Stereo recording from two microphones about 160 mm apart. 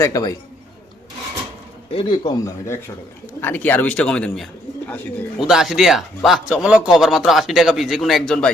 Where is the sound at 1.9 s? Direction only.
30° left (ahead or behind).